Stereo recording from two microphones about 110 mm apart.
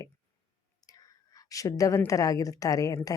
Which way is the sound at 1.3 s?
30° left (ahead or behind).